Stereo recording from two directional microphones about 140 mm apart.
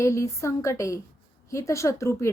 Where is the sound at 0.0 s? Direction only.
20° left (ahead or behind).